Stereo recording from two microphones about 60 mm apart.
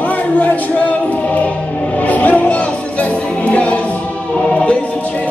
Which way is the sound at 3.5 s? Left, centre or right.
Left.